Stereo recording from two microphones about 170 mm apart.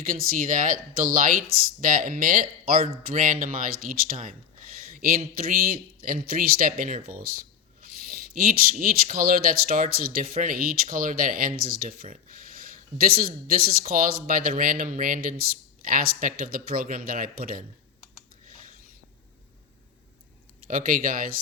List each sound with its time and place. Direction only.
0.0 s speech: 55° right (ahead or behind)
4.9 s a sound: 55° right (ahead or behind)
5.5 s speech: 60° right (ahead or behind)
8.4 s speech: 55° right (ahead or behind)
20.7 s speech: 55° right (ahead or behind)